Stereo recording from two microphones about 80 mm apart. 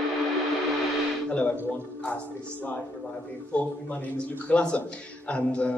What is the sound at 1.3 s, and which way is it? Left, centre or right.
A man's voice, centre.